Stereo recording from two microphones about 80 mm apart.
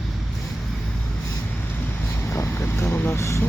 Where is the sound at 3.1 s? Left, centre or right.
Left.